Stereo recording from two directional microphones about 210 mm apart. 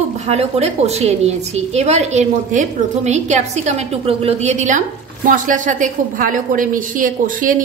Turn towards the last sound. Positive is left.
turn(degrees=-40)  # may be behind; listen again after turning